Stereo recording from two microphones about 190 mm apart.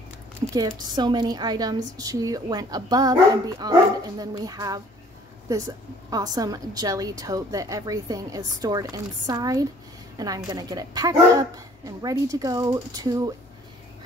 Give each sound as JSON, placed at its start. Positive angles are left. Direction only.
{"t": 0.5, "sound": "a woman's voice", "side_deg": -20}